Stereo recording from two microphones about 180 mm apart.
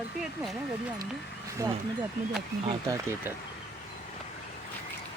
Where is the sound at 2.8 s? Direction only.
15° right (ahead or behind).